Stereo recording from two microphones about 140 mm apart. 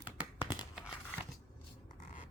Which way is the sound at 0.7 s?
5° right (ahead or behind).